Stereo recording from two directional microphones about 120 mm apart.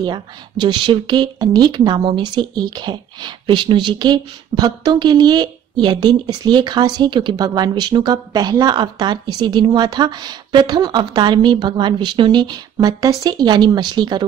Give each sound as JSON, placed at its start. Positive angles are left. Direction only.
{"t": 0.0, "sound": "a woman's voice", "side_deg": -40}